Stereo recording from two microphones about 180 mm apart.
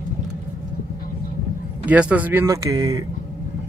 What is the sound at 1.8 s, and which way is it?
Speech, 5° right (ahead or behind).